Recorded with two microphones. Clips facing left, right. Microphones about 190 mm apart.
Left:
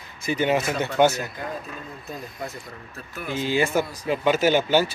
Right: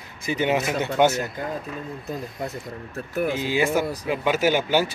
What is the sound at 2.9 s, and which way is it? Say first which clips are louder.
Speech: right 11 dB; 50° right (ahead or behind).